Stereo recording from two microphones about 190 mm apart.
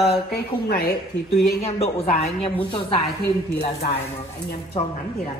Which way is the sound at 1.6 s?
35° left (ahead or behind).